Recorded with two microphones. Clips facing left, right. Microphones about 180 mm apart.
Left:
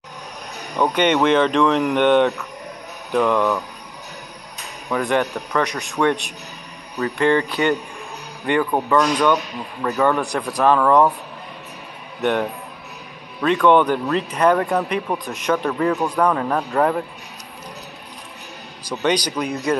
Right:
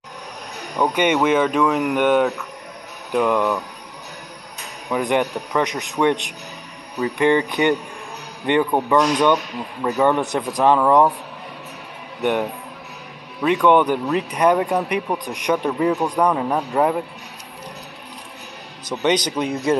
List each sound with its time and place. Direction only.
0.7 s speech: 10° right (ahead or behind)
4.8 s speech: 15° right (ahead or behind)
12.2 s speech: 15° right (ahead or behind)
18.9 s speech: 20° right (ahead or behind)